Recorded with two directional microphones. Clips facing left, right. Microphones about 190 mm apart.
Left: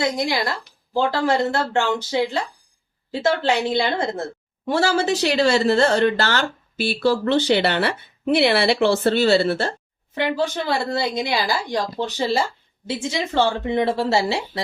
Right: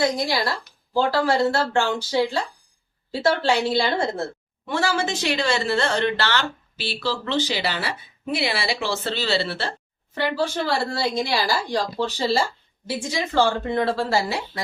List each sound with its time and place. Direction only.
0.9 s a woman's voice: 20° left (ahead or behind)
4.6 s a woman's voice: 40° left (ahead or behind)
10.2 s a woman's voice: 20° left (ahead or behind)